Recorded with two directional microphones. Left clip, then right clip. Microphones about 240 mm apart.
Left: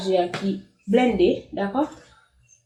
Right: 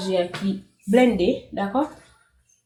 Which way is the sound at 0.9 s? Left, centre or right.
Right.